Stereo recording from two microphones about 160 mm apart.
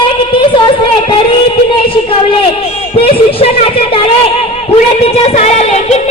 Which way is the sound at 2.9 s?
35° left (ahead or behind).